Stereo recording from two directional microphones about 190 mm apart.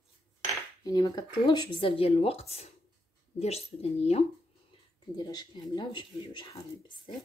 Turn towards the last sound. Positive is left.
turn(degrees=25)  # may be behind; listen again after turning